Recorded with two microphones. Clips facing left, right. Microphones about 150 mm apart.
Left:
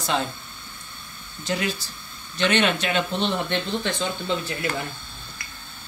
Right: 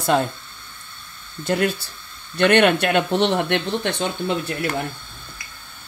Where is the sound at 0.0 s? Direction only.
50° right (ahead or behind).